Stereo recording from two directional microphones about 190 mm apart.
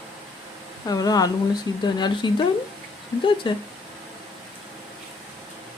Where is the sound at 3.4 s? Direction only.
25° left (ahead or behind).